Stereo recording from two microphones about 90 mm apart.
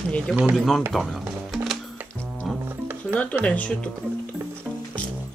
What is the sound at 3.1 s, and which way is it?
Speech, 15° left (ahead or behind).